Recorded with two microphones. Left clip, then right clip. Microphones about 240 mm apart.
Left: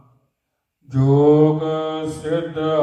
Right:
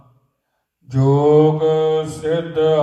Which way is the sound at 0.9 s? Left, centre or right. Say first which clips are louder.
Even; right.